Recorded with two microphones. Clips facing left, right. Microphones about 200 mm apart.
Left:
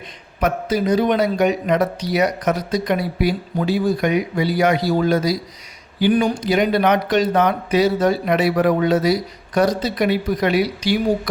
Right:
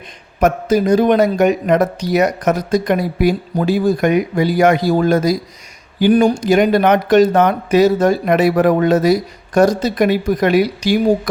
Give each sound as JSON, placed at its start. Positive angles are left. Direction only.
{"t": 0.3, "sound": "a man's voice", "side_deg": -45}